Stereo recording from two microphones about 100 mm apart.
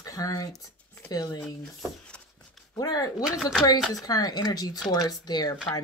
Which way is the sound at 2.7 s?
40° left (ahead or behind).